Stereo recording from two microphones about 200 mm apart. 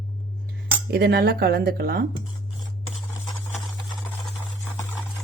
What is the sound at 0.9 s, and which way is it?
Speech, 55° right (ahead or behind).